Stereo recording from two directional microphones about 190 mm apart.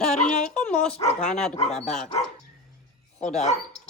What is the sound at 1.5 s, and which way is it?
Speech, 35° left (ahead or behind).